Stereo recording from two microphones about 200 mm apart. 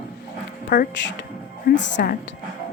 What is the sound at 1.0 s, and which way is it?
Speech, 65° left (ahead or behind).